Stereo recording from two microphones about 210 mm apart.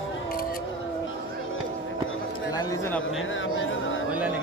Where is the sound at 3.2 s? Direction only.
65° left (ahead or behind).